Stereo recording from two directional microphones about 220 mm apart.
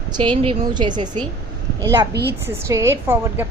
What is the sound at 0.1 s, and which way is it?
A woman's voice, 20° right (ahead or behind).